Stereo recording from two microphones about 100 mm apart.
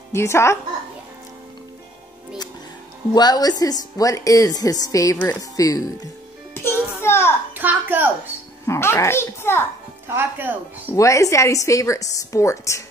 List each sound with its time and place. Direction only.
0.1 s a child's voice: 25° left (ahead or behind)
3.2 s a woman's voice: 40° left (ahead or behind)
6.5 s music: 25° left (ahead or behind)
7.5 s a child's voice: 20° right (ahead or behind)
8.6 s a child's voice: 25° left (ahead or behind)
10.0 s speech: 20° right (ahead or behind)
11.0 s a woman's voice: 30° left (ahead or behind)